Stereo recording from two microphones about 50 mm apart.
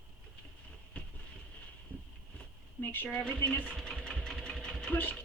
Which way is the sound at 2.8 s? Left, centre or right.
Left.